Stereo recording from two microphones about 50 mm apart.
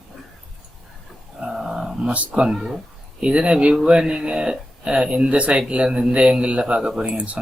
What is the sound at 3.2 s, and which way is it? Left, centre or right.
Speech, right.